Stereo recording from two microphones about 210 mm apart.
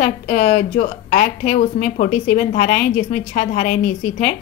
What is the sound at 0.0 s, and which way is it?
A woman's voice, 30° left (ahead or behind).